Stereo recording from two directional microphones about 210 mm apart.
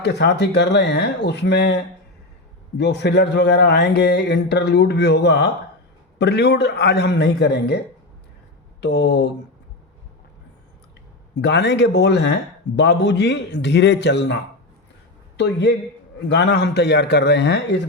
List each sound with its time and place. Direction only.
0.0 s speech: 55° left (ahead or behind)
8.8 s speech: 55° left (ahead or behind)
11.3 s speech: 55° left (ahead or behind)
15.4 s speech: 55° left (ahead or behind)